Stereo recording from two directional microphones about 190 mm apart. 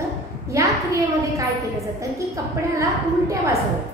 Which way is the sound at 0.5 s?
15° right (ahead or behind).